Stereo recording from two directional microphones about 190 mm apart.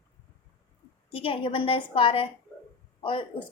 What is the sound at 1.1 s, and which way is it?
A woman's voice, 30° left (ahead or behind).